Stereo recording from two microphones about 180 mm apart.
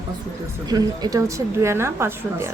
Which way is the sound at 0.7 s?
20° right (ahead or behind).